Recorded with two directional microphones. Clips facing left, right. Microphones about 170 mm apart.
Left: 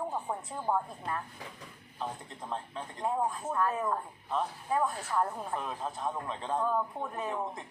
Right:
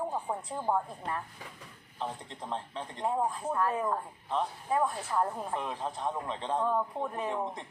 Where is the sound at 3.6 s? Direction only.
15° right (ahead or behind).